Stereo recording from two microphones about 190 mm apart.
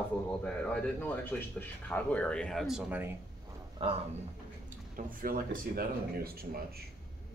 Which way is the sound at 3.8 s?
30° right (ahead or behind).